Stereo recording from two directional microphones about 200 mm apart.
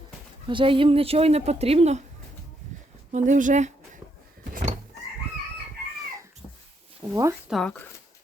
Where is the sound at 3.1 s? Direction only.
40° right (ahead or behind).